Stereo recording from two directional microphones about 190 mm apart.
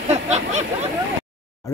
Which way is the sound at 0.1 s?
35° right (ahead or behind).